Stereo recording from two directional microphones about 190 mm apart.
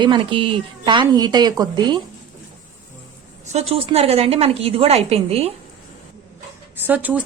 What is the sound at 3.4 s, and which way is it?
Speech, 35° right (ahead or behind).